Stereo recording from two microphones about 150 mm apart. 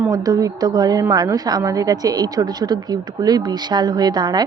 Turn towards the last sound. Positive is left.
turn(degrees=-25)  # may be behind; listen again after turning